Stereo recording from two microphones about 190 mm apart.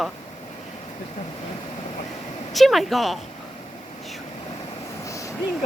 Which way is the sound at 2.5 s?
Centre (ahead or behind).